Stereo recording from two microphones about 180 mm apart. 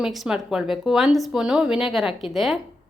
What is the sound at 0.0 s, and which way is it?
Speech, centre (ahead or behind).